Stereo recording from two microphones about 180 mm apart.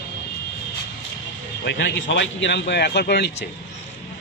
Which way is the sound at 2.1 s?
85° left.